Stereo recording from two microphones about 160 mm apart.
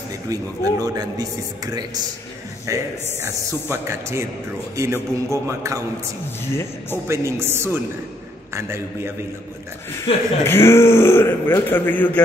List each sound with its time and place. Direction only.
0.3 s a man's voice: 20° right (ahead or behind)
2.6 s a man's voice: 20° right (ahead or behind)
6.5 s speech: 15° left (ahead or behind)
7.1 s speech: 15° right (ahead or behind)
10.1 s speech: 35° left (ahead or behind)
10.4 s speech: 15° left (ahead or behind)